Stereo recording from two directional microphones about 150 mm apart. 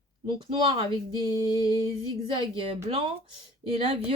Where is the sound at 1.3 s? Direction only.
25° left (ahead or behind).